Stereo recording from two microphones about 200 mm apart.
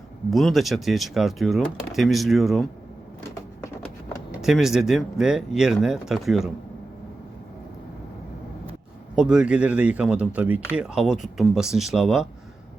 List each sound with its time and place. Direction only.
0.3 s speech: centre (ahead or behind)
4.4 s speech: centre (ahead or behind)
9.1 s speech: 5° right (ahead or behind)